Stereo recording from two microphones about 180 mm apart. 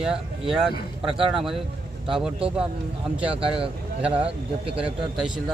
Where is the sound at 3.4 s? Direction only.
30° right (ahead or behind).